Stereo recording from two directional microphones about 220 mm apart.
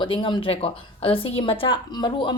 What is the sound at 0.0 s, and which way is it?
A woman's voice, 20° left (ahead or behind).